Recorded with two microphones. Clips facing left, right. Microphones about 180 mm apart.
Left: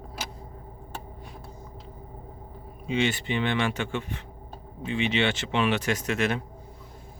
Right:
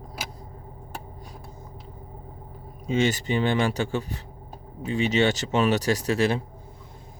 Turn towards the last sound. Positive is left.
turn(degrees=-35)  # may be behind; listen again after turning